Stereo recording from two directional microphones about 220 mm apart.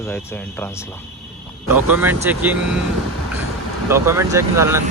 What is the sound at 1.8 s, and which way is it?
Speech, 10° right (ahead or behind).